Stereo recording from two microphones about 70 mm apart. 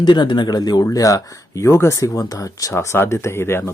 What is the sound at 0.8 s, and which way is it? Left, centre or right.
Speech, left.